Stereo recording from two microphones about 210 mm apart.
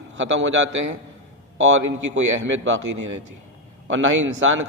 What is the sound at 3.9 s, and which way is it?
Speech, 70° right (ahead or behind).